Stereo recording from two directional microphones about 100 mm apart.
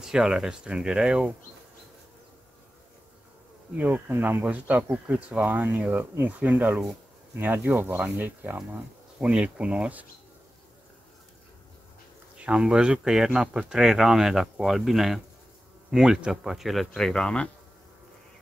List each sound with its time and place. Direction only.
0.0 s speech: 5° right (ahead or behind)
3.7 s speech: 15° right (ahead or behind)
12.4 s speech: 10° right (ahead or behind); by 17.5 s 10° left (ahead or behind)